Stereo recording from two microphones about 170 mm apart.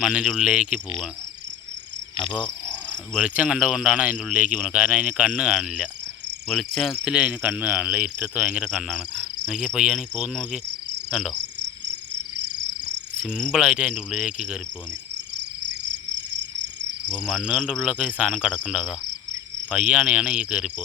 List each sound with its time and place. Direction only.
0.0 s a man's voice: 5° right (ahead or behind)
3.2 s a man's voice: 5° right (ahead or behind)
11.6 s cricket: 90° right
13.5 s a man's voice: 5° right (ahead or behind)
16.1 s a sound: 90° right
17.2 s a man's voice: centre (ahead or behind)